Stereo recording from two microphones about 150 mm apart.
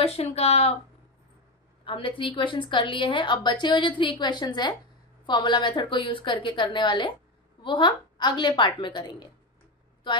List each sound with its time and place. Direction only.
0.0 s speech: 40° left (ahead or behind)
1.9 s a woman's voice: 35° left (ahead or behind)